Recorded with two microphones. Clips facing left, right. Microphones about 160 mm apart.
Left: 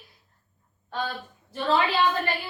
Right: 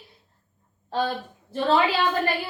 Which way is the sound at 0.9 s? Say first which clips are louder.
Right 6 dB; 35° right (ahead or behind).